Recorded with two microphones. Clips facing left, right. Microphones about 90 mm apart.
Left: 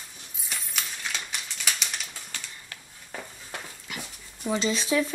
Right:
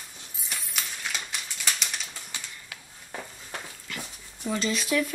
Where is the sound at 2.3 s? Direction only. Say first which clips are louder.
Even; 10° right (ahead or behind).